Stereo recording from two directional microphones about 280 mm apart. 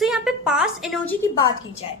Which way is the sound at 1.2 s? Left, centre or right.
Centre.